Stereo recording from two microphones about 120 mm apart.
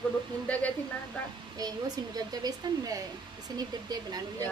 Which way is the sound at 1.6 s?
35° right (ahead or behind).